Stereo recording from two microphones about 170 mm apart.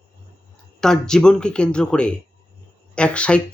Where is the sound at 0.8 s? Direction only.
5° left (ahead or behind).